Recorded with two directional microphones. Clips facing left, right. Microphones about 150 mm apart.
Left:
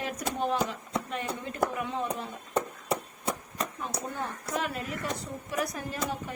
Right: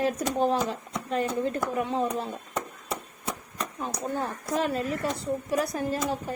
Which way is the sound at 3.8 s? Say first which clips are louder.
Right 4 dB; 35° right (ahead or behind).